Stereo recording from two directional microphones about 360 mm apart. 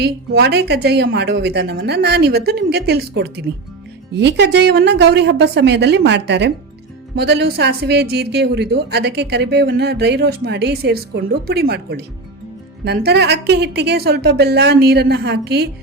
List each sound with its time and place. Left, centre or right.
0.0 s a woman's voice: right